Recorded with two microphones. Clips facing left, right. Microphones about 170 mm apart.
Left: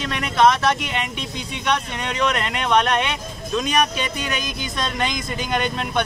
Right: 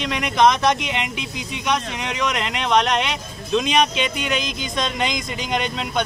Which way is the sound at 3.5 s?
20° right (ahead or behind).